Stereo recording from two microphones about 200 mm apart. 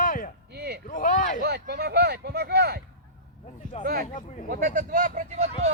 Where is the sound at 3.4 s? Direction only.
35° left (ahead or behind).